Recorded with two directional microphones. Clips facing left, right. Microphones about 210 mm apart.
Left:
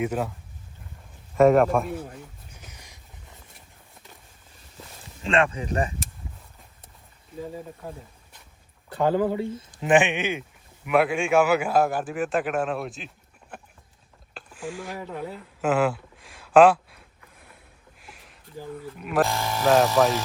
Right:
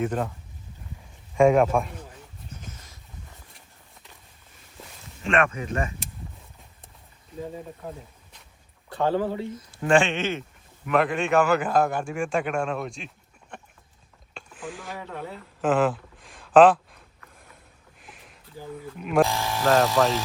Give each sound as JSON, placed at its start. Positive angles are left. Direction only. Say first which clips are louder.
{"t": 0.0, "sound": "speech", "louder": "even", "side_deg": 5}
{"t": 1.4, "sound": "a man's voice", "louder": "left 1 dB", "side_deg": 0}
{"t": 2.5, "sound": "a sound", "louder": "right 5 dB", "side_deg": 10}
{"t": 5.2, "sound": "speech", "louder": "left 1 dB", "side_deg": 30}
{"t": 9.5, "sound": "a man's voice", "louder": "right 3 dB", "side_deg": 20}
{"t": 13.5, "sound": "a sound", "louder": "even", "side_deg": 5}
{"t": 18.9, "sound": "a man's voice", "louder": "right 2 dB", "side_deg": 0}